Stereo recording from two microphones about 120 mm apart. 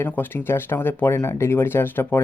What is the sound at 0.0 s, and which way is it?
Speech, 15° left (ahead or behind).